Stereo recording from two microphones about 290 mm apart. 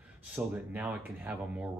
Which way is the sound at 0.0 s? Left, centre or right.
Centre.